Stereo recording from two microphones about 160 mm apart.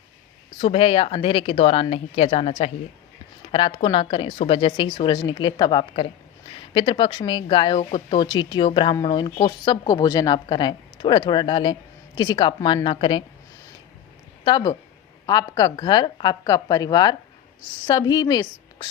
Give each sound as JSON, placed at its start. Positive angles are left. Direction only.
{"t": 0.6, "sound": "speech", "side_deg": 35}
{"t": 14.4, "sound": "speech", "side_deg": 25}